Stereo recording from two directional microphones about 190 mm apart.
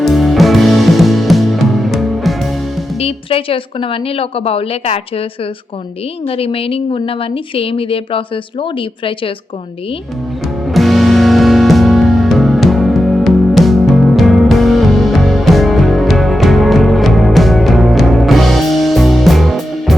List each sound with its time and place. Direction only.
0.0 s music: centre (ahead or behind)
3.0 s speech: 30° left (ahead or behind)
6.2 s speech: 30° left (ahead or behind)
10.7 s music: centre (ahead or behind)